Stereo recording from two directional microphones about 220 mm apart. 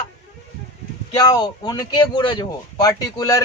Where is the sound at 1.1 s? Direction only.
20° left (ahead or behind).